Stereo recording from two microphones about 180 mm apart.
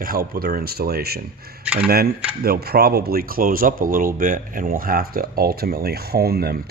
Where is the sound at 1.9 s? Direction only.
60° right (ahead or behind).